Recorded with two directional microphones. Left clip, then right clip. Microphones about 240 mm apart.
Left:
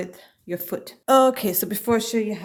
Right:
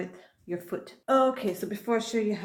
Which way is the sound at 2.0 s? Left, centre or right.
Centre.